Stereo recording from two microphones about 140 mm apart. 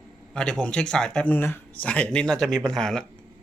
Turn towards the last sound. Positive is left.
turn(degrees=5)  # may be behind; listen again after turning